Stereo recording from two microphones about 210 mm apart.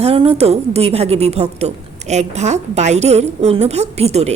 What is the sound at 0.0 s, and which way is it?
A woman's voice, 25° right (ahead or behind).